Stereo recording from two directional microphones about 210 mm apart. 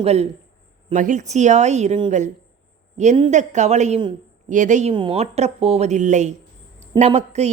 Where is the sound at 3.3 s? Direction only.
35° right (ahead or behind).